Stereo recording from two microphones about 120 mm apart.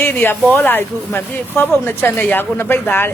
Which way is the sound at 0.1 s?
15° left (ahead or behind).